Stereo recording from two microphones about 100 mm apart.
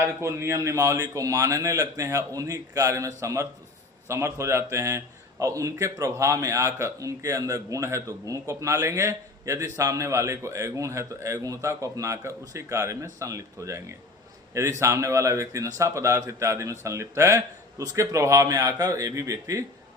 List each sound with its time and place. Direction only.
0.0 s a man's voice: 25° right (ahead or behind)